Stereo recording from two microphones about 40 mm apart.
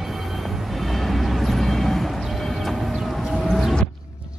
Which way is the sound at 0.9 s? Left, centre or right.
Centre.